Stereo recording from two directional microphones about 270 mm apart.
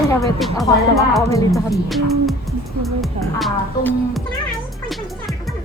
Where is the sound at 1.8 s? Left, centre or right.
Centre.